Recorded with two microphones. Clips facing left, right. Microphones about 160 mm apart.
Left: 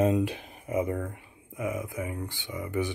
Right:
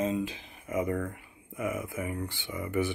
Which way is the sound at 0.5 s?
30° left (ahead or behind).